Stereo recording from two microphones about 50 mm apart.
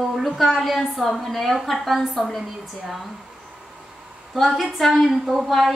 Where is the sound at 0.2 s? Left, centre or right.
Centre.